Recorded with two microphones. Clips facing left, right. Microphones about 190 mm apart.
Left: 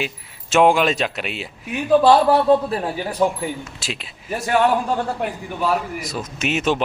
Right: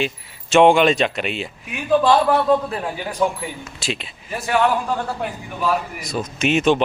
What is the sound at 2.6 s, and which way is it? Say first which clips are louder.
Speech: left 2 dB; 35° left (ahead or behind).